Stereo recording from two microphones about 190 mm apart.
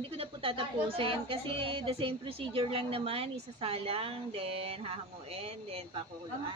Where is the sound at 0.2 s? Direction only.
30° right (ahead or behind).